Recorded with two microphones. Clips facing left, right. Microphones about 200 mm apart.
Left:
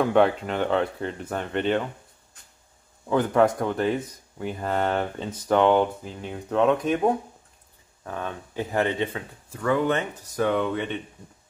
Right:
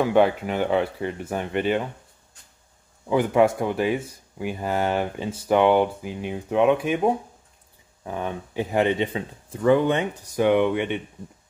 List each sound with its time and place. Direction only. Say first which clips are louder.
0.0 s speech: right 1 dB; 5° right (ahead or behind)
3.1 s speech: right 1 dB; 10° right (ahead or behind)